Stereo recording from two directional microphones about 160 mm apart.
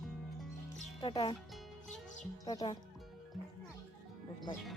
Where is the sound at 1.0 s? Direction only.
30° left (ahead or behind).